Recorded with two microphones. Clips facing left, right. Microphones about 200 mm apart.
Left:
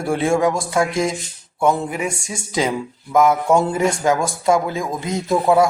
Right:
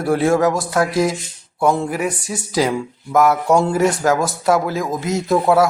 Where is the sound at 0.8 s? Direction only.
5° right (ahead or behind).